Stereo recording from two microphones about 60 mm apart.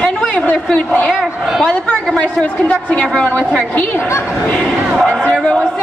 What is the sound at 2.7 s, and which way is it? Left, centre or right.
A woman's voice, centre.